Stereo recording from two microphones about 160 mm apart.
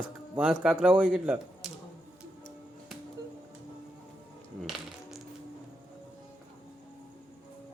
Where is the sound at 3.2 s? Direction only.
25° right (ahead or behind).